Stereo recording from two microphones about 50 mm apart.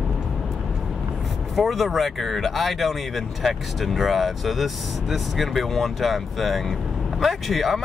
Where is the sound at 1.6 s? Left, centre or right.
Centre.